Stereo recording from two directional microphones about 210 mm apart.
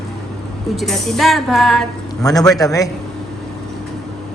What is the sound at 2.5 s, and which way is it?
Speech, 15° left (ahead or behind).